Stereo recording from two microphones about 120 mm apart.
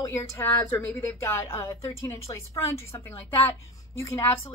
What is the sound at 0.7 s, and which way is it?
A woman's voice, 15° left (ahead or behind).